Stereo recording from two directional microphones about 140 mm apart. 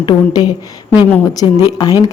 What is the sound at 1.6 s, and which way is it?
Speech, 30° left (ahead or behind).